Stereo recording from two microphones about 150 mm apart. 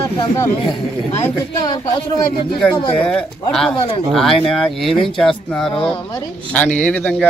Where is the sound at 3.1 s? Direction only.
5° left (ahead or behind).